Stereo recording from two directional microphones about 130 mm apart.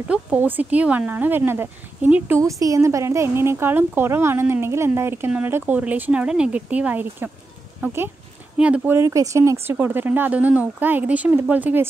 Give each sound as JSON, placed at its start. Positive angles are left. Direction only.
{"t": 0.1, "sound": "speech", "side_deg": -15}